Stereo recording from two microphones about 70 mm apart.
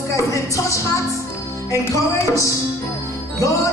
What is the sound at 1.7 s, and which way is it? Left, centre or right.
Music, left.